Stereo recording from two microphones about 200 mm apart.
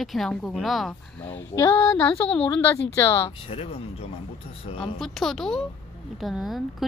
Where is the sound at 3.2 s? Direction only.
25° left (ahead or behind).